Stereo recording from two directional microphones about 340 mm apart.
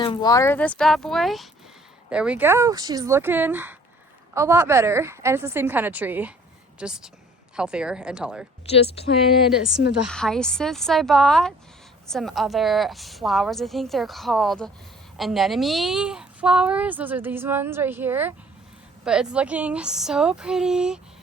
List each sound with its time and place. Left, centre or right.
0.0 s a woman's voice: centre
8.6 s speech: centre
9.6 s a woman's voice: centre